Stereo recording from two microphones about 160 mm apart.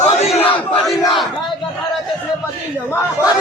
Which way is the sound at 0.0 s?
45° left (ahead or behind).